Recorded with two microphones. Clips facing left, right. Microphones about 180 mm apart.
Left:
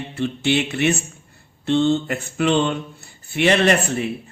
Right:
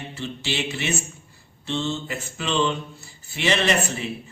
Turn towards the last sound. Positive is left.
turn(degrees=55)  # may be behind; listen again after turning